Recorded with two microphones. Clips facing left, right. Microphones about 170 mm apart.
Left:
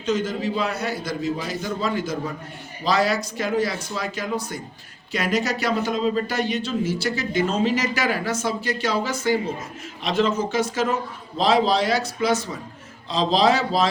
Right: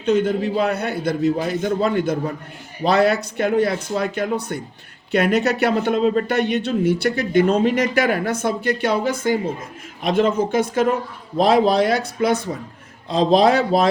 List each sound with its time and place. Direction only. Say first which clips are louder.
0.0 s speech: right 5 dB; 60° right (ahead or behind)